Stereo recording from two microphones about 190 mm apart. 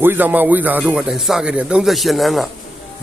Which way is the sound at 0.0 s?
10° right (ahead or behind).